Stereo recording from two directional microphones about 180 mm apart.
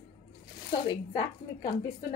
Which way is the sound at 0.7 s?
25° left (ahead or behind).